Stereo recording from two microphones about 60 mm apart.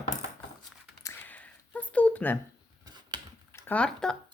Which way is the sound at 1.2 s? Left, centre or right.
Left.